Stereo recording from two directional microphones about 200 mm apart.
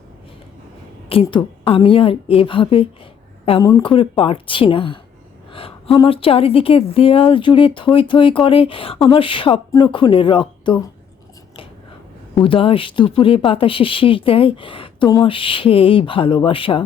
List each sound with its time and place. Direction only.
1.1 s speech: 25° left (ahead or behind)
6.0 s speech: 25° left (ahead or behind)
12.4 s speech: 25° left (ahead or behind)